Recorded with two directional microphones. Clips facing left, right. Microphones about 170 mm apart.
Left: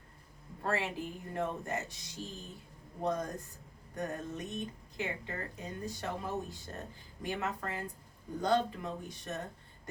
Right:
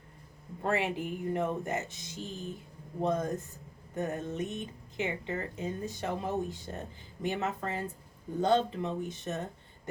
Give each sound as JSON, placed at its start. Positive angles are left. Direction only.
{"t": 0.6, "sound": "speech", "side_deg": -20}